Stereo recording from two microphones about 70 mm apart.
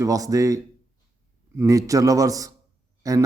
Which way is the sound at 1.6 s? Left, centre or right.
Right.